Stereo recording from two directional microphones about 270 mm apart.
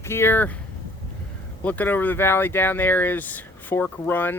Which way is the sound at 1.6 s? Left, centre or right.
Centre.